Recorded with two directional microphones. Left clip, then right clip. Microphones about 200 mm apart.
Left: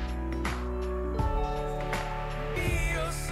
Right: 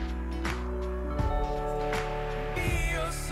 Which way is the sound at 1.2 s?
Centre (ahead or behind).